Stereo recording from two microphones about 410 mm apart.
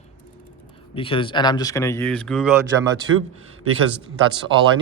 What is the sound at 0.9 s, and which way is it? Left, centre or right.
Speech, centre.